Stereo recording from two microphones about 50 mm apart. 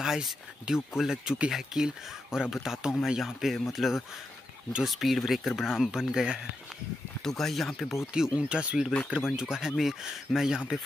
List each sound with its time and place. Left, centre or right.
0.0 s speech: centre
7.2 s speech: centre
8.1 s speech: centre